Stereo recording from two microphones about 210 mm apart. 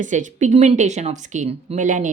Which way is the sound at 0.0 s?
35° right (ahead or behind).